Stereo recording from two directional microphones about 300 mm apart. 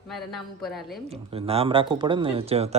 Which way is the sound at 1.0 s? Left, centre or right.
Centre.